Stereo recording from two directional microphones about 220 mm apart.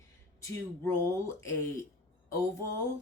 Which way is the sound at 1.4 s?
15° left (ahead or behind).